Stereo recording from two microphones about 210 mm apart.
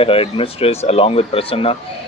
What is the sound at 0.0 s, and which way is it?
Speech, 25° left (ahead or behind).